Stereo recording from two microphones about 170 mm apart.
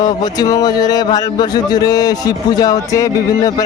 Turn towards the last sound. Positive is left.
turn(degrees=20)  # may be behind; listen again after turning